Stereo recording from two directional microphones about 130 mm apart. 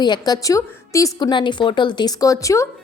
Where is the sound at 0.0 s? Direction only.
30° left (ahead or behind).